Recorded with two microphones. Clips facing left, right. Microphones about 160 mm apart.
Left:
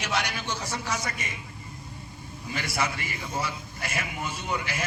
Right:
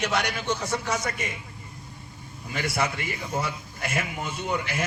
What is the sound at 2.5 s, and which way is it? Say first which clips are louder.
A man's voice: right 2 dB; 55° right (ahead or behind).